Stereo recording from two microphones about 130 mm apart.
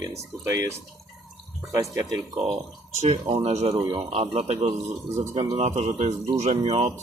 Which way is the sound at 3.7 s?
35° right (ahead or behind).